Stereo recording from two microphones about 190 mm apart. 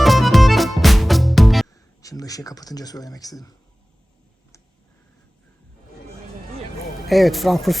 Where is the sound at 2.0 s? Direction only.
20° left (ahead or behind).